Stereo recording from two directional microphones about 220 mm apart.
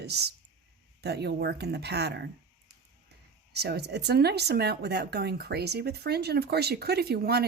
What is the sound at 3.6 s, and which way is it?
Speech, 50° right (ahead or behind).